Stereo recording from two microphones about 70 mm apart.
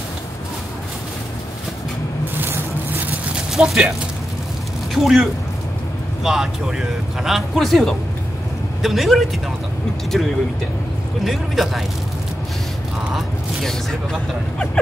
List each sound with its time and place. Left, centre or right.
2.3 s vehicle: right
3.5 s speech: centre
4.9 s speech: centre
13.1 s a sound: centre